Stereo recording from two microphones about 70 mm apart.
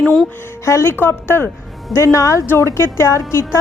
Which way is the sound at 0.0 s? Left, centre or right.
Centre.